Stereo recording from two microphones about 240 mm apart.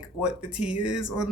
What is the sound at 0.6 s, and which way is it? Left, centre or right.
Speech, left.